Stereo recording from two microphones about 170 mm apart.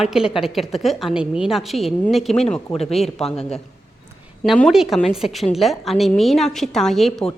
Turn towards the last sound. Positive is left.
turn(degrees=0)  # may be behind; listen again after turning